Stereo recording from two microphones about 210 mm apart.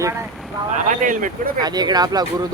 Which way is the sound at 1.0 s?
40° right (ahead or behind).